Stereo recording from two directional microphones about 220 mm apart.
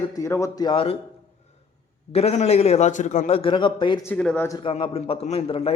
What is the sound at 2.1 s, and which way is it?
A man's voice, 30° left (ahead or behind).